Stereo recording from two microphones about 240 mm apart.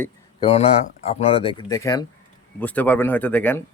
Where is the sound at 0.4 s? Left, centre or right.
Left.